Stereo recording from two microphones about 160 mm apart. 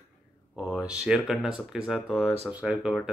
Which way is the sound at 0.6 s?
5° right (ahead or behind).